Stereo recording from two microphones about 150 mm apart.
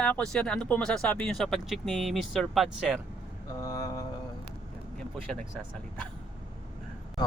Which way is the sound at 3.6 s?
20° left (ahead or behind).